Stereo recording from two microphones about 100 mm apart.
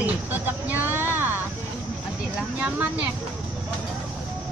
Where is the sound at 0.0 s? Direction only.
20° right (ahead or behind).